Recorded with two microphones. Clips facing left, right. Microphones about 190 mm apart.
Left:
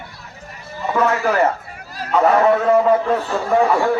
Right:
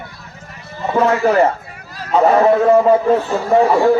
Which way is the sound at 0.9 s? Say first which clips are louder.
Right 4 dB; 30° right (ahead or behind).